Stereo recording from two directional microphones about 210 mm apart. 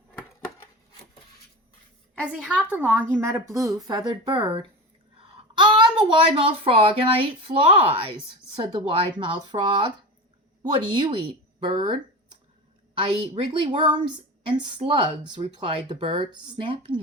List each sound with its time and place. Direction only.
2.2 s a woman's voice: 5° right (ahead or behind); by 11.2 s 20° right (ahead or behind)
11.6 s a sound: 25° right (ahead or behind)
12.9 s speech: 25° right (ahead or behind)